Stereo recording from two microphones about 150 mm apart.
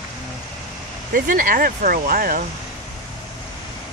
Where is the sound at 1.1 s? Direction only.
65° right (ahead or behind).